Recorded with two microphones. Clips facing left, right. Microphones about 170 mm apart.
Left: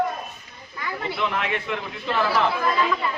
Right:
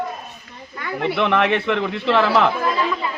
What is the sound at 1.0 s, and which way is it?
A man's voice, 75° right (ahead or behind).